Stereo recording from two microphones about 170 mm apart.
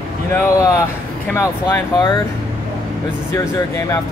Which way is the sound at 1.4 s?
15° left (ahead or behind).